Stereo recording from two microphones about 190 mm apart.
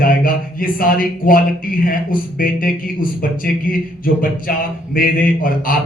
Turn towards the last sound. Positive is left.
turn(degrees=50)  # may be behind; listen again after turning